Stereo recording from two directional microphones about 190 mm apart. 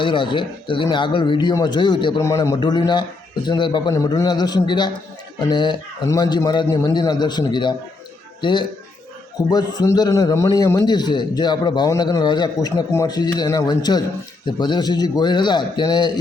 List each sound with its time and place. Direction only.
0.0 s a man's voice: 25° left (ahead or behind)